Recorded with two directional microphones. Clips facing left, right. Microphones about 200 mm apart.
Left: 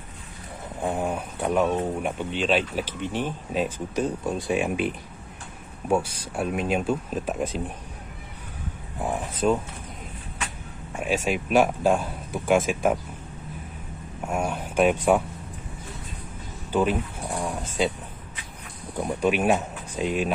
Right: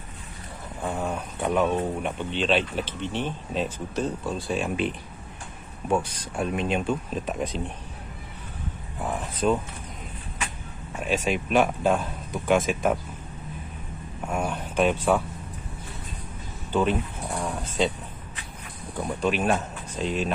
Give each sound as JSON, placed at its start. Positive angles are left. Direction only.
{"t": 0.8, "sound": "a sound", "side_deg": 15}
{"t": 1.4, "sound": "speech", "side_deg": 5}
{"t": 9.4, "sound": "speech", "side_deg": 5}
{"t": 11.0, "sound": "speech", "side_deg": 10}
{"t": 14.2, "sound": "speech", "side_deg": 10}
{"t": 16.7, "sound": "a sound", "side_deg": 10}
{"t": 19.2, "sound": "speech", "side_deg": 10}